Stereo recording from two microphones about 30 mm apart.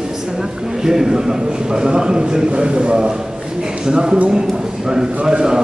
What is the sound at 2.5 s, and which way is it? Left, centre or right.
A man's voice, right.